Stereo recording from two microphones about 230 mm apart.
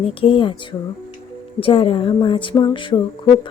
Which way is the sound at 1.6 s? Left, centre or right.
Left.